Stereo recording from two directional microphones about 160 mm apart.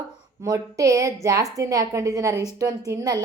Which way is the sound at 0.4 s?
20° right (ahead or behind).